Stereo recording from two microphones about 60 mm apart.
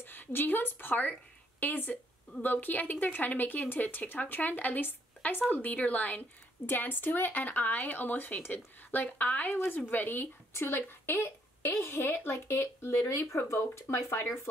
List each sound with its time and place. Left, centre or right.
0.0 s a woman's voice: left